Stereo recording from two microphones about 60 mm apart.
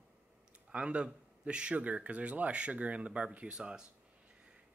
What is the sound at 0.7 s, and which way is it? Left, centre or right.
Speech, centre.